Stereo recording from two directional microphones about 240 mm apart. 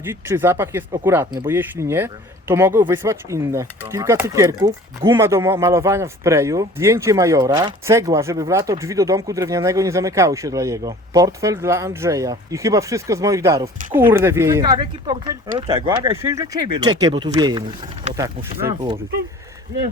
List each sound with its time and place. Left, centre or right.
0.0 s speech: centre
18.7 s speech: right